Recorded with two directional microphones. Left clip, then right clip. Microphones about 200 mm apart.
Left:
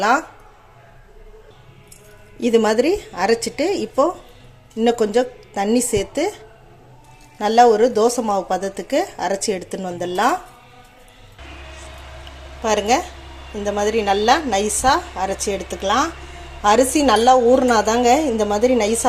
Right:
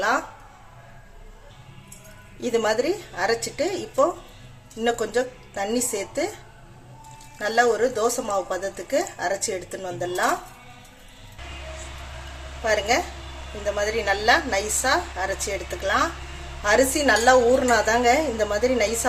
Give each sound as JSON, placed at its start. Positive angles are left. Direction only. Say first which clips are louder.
{"t": 2.4, "sound": "speech", "louder": "left 6 dB", "side_deg": 35}
{"t": 7.3, "sound": "speech", "louder": "left 8 dB", "side_deg": 35}
{"t": 12.6, "sound": "a woman's voice", "louder": "left 4 dB", "side_deg": 30}